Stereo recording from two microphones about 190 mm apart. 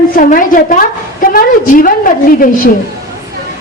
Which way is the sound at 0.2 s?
45° left (ahead or behind).